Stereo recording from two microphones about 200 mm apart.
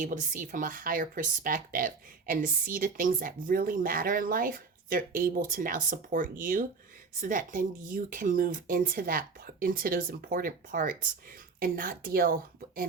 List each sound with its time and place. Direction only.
0.0 s speech: 40° right (ahead or behind)